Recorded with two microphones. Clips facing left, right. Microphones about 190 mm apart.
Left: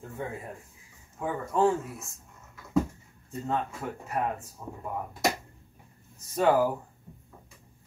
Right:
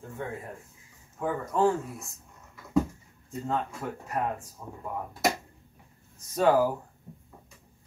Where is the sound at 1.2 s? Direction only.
5° left (ahead or behind).